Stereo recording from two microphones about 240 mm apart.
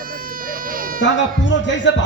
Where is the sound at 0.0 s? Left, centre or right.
Right.